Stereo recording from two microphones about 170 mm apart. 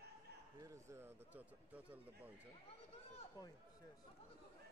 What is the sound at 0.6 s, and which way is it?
Speech, 15° right (ahead or behind).